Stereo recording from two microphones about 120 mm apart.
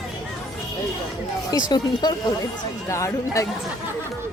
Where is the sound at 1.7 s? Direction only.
35° left (ahead or behind).